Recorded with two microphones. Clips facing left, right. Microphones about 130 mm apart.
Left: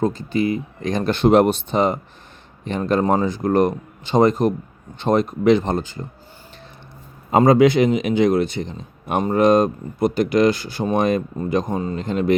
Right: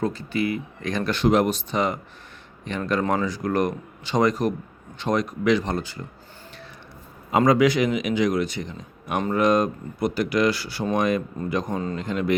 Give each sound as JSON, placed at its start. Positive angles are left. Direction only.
{"t": 0.4, "sound": "speech", "side_deg": 25}
{"t": 7.3, "sound": "speech", "side_deg": 30}